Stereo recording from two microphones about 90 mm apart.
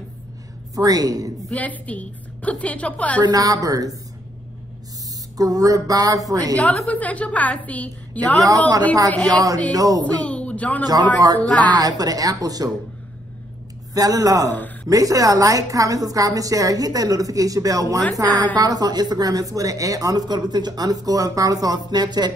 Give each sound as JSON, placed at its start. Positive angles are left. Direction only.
{"t": 0.7, "sound": "a woman's voice", "side_deg": -45}
{"t": 1.5, "sound": "a woman's voice", "side_deg": 15}
{"t": 3.2, "sound": "speech", "side_deg": -45}
{"t": 5.4, "sound": "a woman's voice", "side_deg": -40}
{"t": 6.5, "sound": "a woman's voice", "side_deg": 15}
{"t": 8.5, "sound": "a woman's voice", "side_deg": -40}
{"t": 10.2, "sound": "a woman's voice", "side_deg": 15}
{"t": 11.6, "sound": "speech", "side_deg": -50}
{"t": 13.9, "sound": "a woman's voice", "side_deg": -40}